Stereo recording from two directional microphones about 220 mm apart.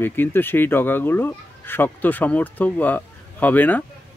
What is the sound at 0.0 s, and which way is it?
Speech, 10° left (ahead or behind).